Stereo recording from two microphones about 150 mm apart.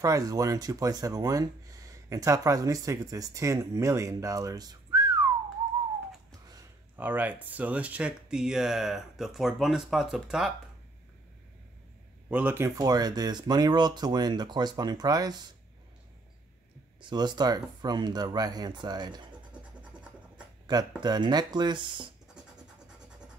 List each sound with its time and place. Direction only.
0.0 s speech: 25° right (ahead or behind)
7.0 s speech: 10° right (ahead or behind)
12.3 s speech: 10° right (ahead or behind); by 15.3 s 25° right (ahead or behind)
17.0 s speech: 30° right (ahead or behind)
20.6 s speech: 30° right (ahead or behind)